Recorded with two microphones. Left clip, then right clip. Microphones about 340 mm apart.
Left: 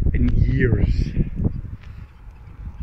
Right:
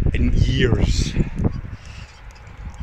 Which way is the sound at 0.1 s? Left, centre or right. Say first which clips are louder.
Even; right.